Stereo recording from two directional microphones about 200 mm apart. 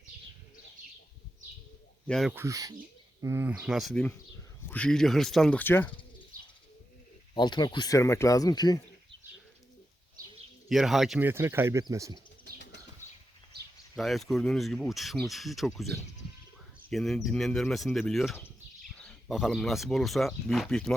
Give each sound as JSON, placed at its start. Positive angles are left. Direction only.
{"t": 2.0, "sound": "speech", "side_deg": 0}
{"t": 2.3, "sound": "speech", "side_deg": -15}
{"t": 7.3, "sound": "speech", "side_deg": 20}
{"t": 10.7, "sound": "speech", "side_deg": 0}
{"t": 13.9, "sound": "speech", "side_deg": 0}